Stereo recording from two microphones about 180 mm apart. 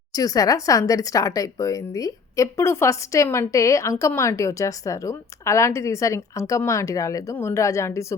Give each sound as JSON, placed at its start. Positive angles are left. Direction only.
{"t": 0.1, "sound": "speech", "side_deg": 20}